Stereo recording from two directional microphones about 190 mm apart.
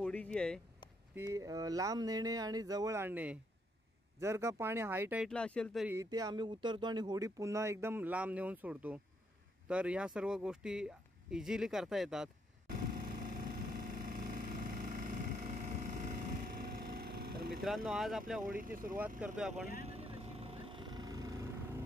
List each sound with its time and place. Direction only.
0.0 s a sound: 5° left (ahead or behind)
1.1 s speech: 15° right (ahead or behind)
5.3 s speech: 5° left (ahead or behind)
5.9 s speech: 15° right (ahead or behind)
12.6 s vehicle: 50° right (ahead or behind)
17.6 s speech: centre (ahead or behind)
18.5 s speech: 50° right (ahead or behind)
19.1 s speech: 5° right (ahead or behind)
19.9 s vehicle: 30° right (ahead or behind)